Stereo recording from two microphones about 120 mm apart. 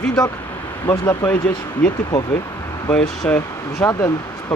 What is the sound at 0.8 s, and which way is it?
Speech, 25° left (ahead or behind).